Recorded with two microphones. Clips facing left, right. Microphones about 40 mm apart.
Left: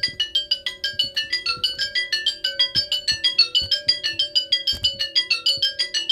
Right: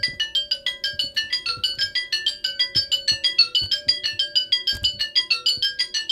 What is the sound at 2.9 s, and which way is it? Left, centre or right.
Music, centre.